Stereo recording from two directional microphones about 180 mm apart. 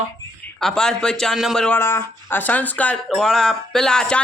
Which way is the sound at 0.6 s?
5° left (ahead or behind).